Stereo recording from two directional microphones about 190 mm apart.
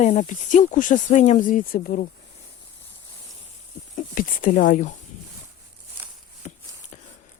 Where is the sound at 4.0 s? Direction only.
45° left (ahead or behind).